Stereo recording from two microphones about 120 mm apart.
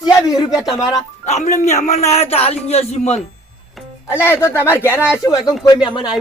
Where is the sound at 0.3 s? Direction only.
30° left (ahead or behind).